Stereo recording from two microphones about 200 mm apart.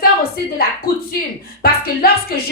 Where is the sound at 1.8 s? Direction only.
50° left (ahead or behind).